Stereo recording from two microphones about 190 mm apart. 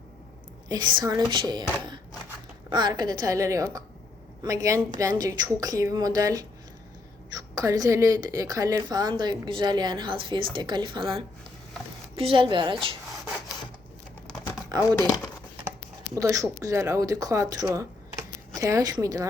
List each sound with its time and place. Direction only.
0.7 s a woman's voice: 20° right (ahead or behind)
2.6 s a woman's voice: 20° right (ahead or behind)
12.1 s a woman's voice: 30° right (ahead or behind)
14.9 s speech: 20° left (ahead or behind)
16.1 s a woman's voice: 15° right (ahead or behind)